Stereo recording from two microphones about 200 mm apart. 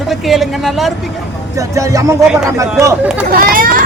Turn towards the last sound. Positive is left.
turn(degrees=-45)  # may be behind; listen again after turning